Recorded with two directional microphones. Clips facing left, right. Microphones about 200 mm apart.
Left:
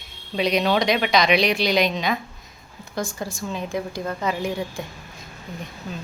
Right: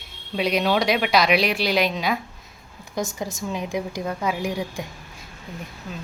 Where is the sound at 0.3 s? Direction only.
5° right (ahead or behind).